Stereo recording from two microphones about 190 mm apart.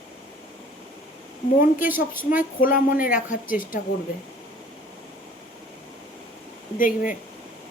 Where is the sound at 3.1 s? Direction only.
5° right (ahead or behind).